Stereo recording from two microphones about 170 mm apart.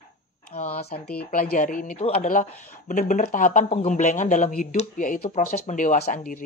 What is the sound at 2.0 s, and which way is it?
Speech, 40° left (ahead or behind).